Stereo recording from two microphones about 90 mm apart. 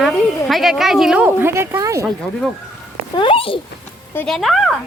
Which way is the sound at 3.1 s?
85° left.